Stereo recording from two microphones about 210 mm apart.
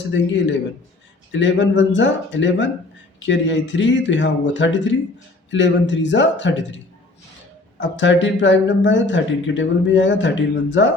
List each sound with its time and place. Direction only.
0.1 s speech: 60° left (ahead or behind)
7.8 s speech: 60° left (ahead or behind)